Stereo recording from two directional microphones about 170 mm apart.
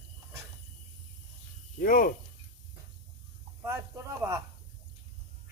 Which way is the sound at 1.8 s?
55° left (ahead or behind).